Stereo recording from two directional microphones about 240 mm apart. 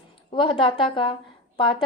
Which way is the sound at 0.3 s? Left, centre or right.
Centre.